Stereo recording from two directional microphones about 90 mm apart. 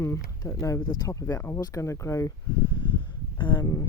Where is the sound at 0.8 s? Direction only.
50° left (ahead or behind); by 2.3 s 35° left (ahead or behind).